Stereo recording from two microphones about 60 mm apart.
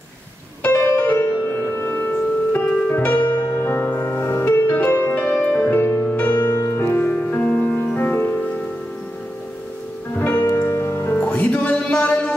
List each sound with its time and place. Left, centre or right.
0.7 s music: left
6.0 s music: left
6.5 s music: left
6.9 s music: left
10.1 s music: left
10.4 s music: left